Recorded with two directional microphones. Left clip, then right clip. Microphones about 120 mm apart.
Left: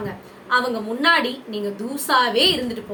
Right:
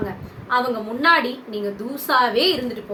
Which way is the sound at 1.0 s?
5° left (ahead or behind).